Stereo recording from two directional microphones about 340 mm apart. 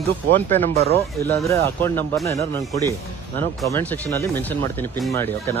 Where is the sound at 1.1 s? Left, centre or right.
Centre.